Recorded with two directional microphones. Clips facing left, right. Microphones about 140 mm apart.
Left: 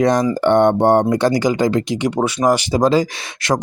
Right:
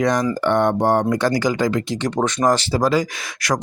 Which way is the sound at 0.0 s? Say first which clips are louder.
Left 4 dB; 25° left (ahead or behind).